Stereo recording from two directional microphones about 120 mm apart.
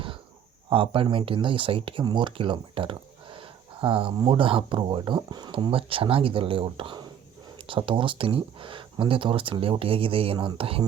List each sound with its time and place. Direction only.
0.7 s speech: 45° right (ahead or behind)